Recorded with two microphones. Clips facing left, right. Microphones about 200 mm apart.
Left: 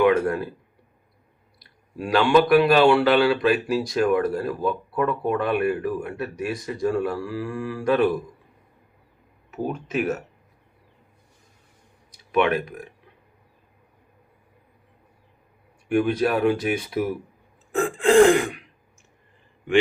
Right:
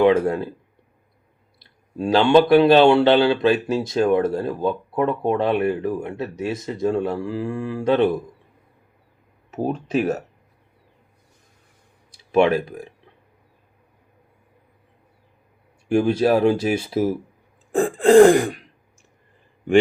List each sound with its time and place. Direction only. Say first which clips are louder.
0.0 s speech: right 2 dB; 25° right (ahead or behind)
2.0 s speech: right 3 dB; 25° right (ahead or behind)
9.5 s throat clearing: right 4 dB; 30° right (ahead or behind)
12.1 s speech: right 4 dB; 30° right (ahead or behind)
15.9 s speech: right 4 dB; 30° right (ahead or behind)
17.7 s throat clearing: right 4 dB; 35° right (ahead or behind)